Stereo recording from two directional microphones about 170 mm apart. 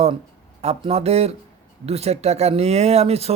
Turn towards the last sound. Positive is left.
turn(degrees=-35)  # may be behind; listen again after turning